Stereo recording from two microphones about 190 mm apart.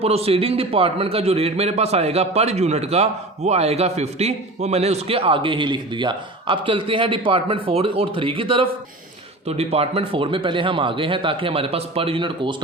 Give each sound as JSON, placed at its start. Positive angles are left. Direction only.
{"t": 0.0, "sound": "a man's voice", "side_deg": -30}